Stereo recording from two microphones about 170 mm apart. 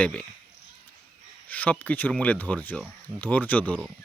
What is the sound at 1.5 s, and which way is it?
Speech, 10° left (ahead or behind).